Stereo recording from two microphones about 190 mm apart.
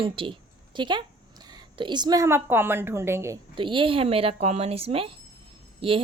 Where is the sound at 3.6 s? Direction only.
25° right (ahead or behind).